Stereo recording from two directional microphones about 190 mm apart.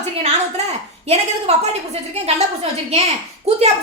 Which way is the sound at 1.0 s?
35° right (ahead or behind).